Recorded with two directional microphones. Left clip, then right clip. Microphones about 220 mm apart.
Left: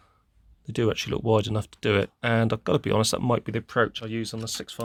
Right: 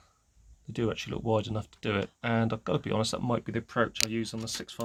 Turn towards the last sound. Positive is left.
turn(degrees=40)  # may be behind; listen again after turning